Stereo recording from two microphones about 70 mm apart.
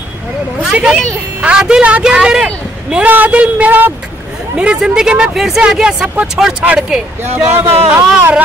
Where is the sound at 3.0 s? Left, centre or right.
Right.